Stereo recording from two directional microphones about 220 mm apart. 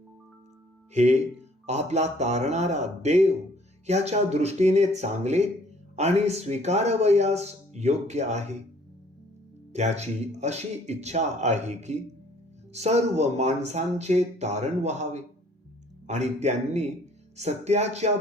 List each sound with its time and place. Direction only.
0.9 s speech: 30° right (ahead or behind)
9.7 s speech: 30° right (ahead or behind)